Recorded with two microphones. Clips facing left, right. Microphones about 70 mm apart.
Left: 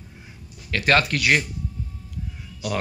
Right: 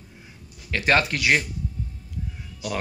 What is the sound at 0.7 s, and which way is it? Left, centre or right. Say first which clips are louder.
Speech: left 1 dB; centre.